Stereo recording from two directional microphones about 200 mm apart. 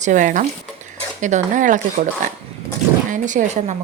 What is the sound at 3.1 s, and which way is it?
Speech, 40° right (ahead or behind).